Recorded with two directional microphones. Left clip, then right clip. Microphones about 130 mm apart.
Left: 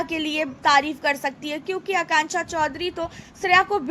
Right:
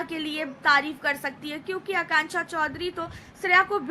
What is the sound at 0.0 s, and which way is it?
A woman's voice, 35° left (ahead or behind).